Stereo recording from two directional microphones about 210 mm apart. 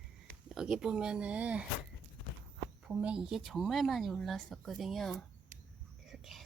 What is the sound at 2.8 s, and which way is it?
A woman's voice, 5° right (ahead or behind).